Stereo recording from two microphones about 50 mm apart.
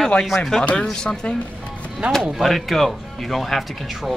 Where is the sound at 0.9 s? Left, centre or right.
Centre.